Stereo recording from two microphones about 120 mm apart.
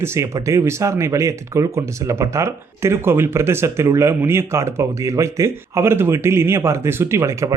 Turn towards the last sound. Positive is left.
turn(degrees=-25)  # may be behind; listen again after turning